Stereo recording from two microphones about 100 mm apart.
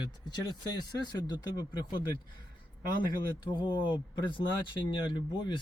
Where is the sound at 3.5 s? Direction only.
50° left (ahead or behind).